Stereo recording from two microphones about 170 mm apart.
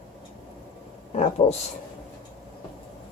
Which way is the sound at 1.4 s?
30° left (ahead or behind).